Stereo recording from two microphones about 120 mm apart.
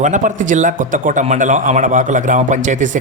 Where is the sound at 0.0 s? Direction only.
90° right.